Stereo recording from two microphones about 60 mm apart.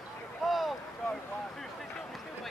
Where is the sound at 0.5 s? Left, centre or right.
Centre.